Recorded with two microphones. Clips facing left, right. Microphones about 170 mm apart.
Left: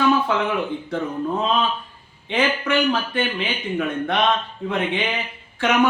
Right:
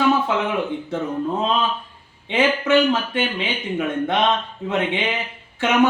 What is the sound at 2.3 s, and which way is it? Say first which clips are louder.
A man's voice: right 3 dB; 20° right (ahead or behind).